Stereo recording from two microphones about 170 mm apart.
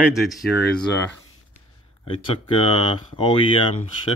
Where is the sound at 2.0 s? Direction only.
35° left (ahead or behind).